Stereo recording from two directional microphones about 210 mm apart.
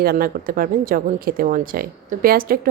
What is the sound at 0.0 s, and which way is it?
A woman's voice, 45° right (ahead or behind).